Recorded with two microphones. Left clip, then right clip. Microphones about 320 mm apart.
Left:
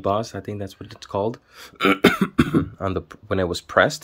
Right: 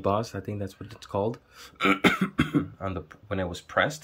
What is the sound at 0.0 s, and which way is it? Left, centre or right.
Speech, centre.